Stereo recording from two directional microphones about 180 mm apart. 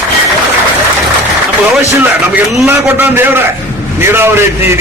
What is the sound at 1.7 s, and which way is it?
A man's voice, 5° right (ahead or behind).